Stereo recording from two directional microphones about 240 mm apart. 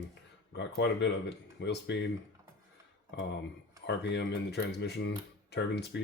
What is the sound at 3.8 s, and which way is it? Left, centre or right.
Speech, left.